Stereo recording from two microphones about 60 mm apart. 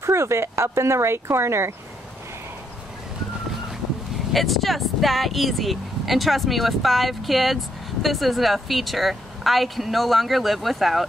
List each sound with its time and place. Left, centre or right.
0.0 s speech: right
4.3 s speech: centre